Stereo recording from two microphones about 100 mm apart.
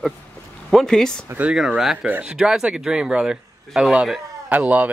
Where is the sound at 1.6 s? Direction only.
5° right (ahead or behind).